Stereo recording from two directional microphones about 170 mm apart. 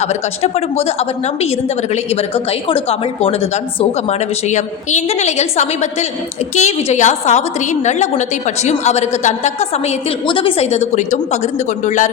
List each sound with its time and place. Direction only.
0.0 s a woman's voice: 40° left (ahead or behind)